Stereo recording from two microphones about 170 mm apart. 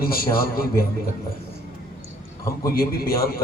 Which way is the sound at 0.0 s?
60° left (ahead or behind).